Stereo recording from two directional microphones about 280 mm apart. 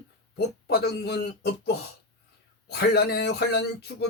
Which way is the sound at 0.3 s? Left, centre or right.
Left.